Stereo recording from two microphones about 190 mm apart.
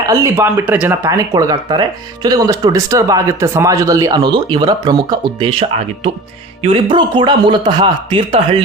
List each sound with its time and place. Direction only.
0.1 s speech: 15° right (ahead or behind)